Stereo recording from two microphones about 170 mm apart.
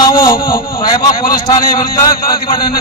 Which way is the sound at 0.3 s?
60° left (ahead or behind).